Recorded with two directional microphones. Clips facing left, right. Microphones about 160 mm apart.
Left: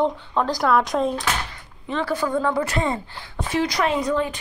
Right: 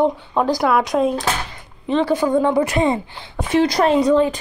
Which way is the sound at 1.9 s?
20° right (ahead or behind).